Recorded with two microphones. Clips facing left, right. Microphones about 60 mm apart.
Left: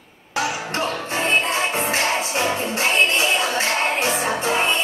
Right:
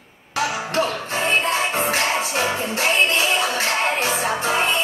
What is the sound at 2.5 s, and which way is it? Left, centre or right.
Speech, centre.